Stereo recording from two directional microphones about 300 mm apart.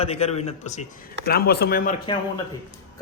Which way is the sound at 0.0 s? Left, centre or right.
Left.